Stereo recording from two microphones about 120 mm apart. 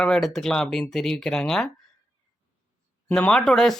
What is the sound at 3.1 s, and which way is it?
Speech, 5° left (ahead or behind).